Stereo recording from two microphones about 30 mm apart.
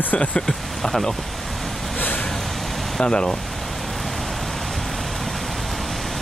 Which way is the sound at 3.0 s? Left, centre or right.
Left.